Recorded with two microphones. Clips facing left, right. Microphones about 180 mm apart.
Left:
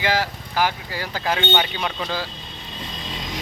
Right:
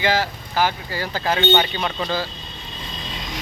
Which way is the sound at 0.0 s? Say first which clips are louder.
Right 2 dB; 10° left (ahead or behind).